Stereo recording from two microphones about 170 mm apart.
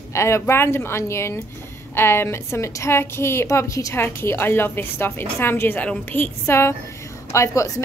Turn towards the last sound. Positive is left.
turn(degrees=20)  # may be behind; listen again after turning